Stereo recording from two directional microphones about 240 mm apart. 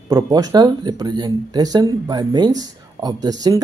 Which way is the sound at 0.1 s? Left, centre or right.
Centre.